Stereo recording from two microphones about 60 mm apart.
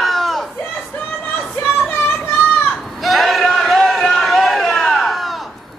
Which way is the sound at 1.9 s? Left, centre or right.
Left.